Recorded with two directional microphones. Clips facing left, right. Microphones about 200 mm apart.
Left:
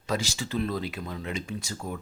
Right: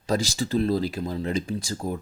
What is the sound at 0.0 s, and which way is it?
Speech, 35° right (ahead or behind).